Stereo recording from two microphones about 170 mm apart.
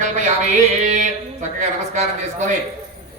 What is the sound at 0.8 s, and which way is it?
Speech, 40° right (ahead or behind).